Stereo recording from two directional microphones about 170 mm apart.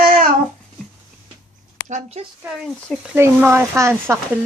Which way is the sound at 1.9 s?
45° right (ahead or behind).